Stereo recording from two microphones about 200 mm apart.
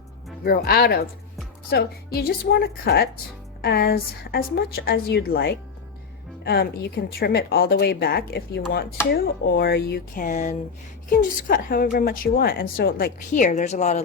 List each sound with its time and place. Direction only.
0.4 s a woman's voice: 50° left (ahead or behind)